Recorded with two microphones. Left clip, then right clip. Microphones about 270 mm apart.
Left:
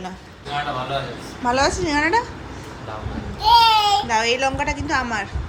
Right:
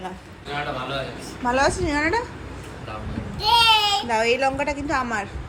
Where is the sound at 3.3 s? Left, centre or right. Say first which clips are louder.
Left 3 dB; centre.